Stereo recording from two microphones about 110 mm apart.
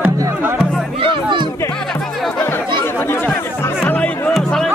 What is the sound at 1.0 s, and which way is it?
Music, 45° right (ahead or behind).